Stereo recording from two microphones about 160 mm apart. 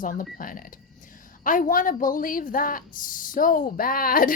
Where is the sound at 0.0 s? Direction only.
60° left (ahead or behind).